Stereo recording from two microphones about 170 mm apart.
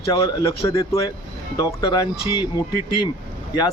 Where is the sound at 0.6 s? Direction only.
35° left (ahead or behind).